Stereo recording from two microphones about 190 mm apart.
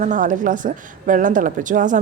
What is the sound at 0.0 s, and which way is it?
A woman's voice, 45° right (ahead or behind).